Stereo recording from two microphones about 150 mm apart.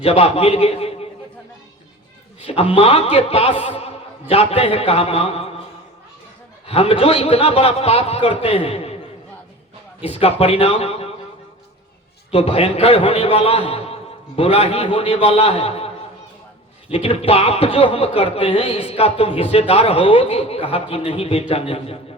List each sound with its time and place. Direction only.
0.0 s a man's voice: 40° left (ahead or behind)
2.4 s a man's voice: 40° left (ahead or behind)
6.7 s a man's voice: 40° left (ahead or behind)
10.1 s a man's voice: 40° left (ahead or behind)
12.3 s a man's voice: 40° left (ahead or behind)
16.9 s a man's voice: 40° left (ahead or behind)